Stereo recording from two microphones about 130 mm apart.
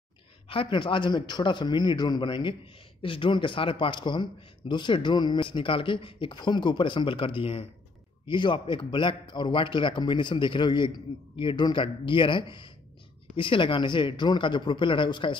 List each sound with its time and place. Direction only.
0.5 s a man's voice: 40° left (ahead or behind)